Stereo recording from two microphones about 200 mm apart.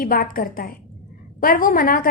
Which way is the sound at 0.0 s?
45° left (ahead or behind).